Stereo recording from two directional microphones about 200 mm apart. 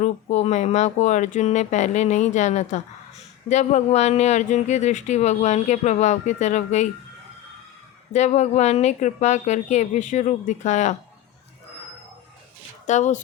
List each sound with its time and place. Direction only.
0.0 s speech: 35° left (ahead or behind)
8.1 s speech: 35° left (ahead or behind)
12.9 s speech: 35° left (ahead or behind)